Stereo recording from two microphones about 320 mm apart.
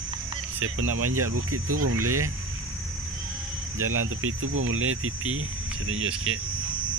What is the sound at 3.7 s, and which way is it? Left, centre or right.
Speech, right.